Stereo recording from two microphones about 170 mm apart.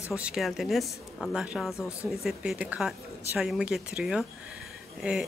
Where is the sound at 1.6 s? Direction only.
15° left (ahead or behind).